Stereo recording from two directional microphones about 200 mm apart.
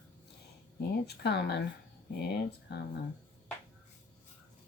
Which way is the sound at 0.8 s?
55° left (ahead or behind).